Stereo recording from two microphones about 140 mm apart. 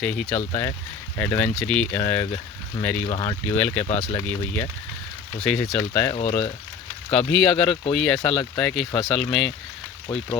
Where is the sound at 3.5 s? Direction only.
10° left (ahead or behind).